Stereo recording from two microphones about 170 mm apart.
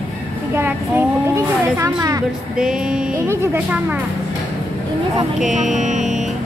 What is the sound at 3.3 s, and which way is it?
Speech, 15° right (ahead or behind).